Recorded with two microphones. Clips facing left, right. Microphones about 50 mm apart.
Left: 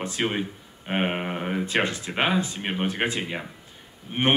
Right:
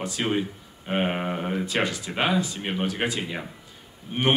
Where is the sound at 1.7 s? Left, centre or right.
Left.